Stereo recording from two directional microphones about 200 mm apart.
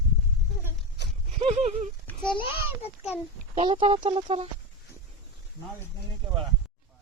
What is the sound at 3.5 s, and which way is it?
Speech, 25° right (ahead or behind).